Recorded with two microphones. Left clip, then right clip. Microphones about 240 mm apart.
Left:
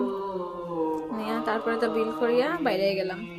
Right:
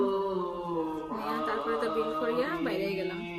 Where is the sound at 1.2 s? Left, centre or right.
Left.